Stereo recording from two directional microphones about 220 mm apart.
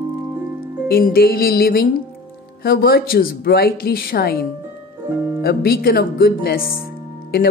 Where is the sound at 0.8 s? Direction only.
45° left (ahead or behind).